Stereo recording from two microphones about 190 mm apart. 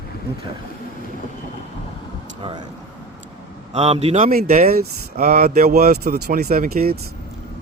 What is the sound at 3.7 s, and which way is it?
Speech, 35° right (ahead or behind).